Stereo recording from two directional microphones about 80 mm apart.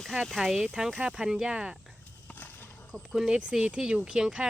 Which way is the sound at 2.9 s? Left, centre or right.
Centre.